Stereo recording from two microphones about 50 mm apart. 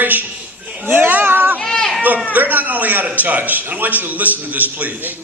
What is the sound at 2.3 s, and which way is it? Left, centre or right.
A man's voice, right.